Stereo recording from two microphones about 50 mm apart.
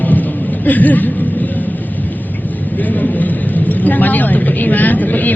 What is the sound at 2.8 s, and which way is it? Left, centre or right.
Vehicle, left.